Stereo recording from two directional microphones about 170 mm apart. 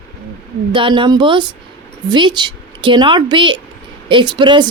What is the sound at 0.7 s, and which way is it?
Speech, 30° right (ahead or behind).